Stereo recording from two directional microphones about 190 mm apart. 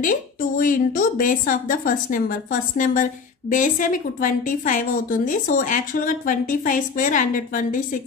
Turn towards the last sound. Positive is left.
turn(degrees=45)  # may be behind; listen again after turning